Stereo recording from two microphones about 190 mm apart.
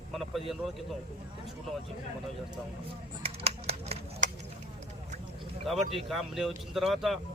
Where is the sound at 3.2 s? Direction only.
30° right (ahead or behind).